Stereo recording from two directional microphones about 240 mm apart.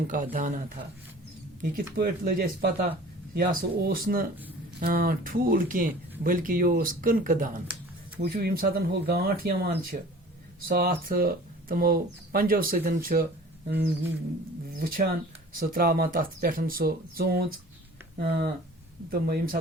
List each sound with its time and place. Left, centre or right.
0.1 s speech: right
1.6 s speech: right
13.7 s a sound: right
14.8 s speech: right